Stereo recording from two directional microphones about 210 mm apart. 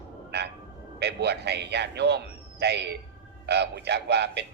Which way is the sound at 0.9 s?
50° right (ahead or behind).